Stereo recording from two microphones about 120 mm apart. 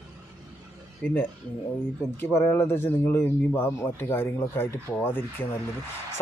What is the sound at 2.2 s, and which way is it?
A man's voice, 20° left (ahead or behind).